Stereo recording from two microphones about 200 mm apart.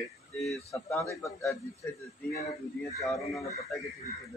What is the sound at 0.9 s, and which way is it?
Speech, 15° left (ahead or behind).